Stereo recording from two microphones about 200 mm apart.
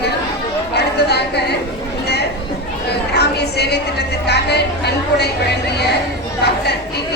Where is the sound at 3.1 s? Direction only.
55° left (ahead or behind).